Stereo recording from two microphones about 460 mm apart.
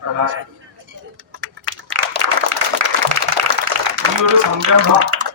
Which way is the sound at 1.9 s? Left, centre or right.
Right.